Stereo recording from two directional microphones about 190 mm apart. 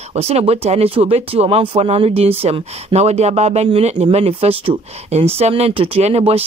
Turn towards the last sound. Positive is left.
turn(degrees=-30)  # may be behind; listen again after turning